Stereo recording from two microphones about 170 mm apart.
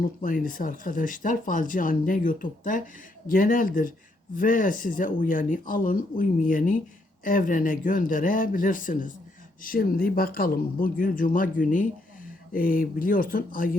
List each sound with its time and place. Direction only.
0.0 s speech: 55° left (ahead or behind)